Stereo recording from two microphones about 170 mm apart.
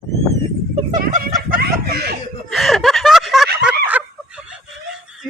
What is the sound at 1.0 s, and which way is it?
Snicker, 60° right (ahead or behind).